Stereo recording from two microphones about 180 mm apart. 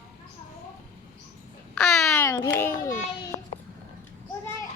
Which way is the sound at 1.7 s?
10° left (ahead or behind).